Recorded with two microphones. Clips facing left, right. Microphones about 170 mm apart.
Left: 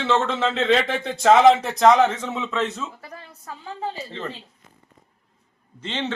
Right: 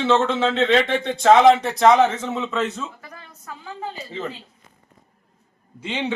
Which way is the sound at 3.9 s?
5° right (ahead or behind).